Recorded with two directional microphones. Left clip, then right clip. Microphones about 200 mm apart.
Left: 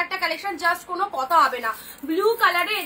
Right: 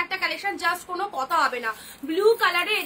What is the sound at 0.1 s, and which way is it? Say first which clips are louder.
A woman's voice: left 1 dB; 20° right (ahead or behind).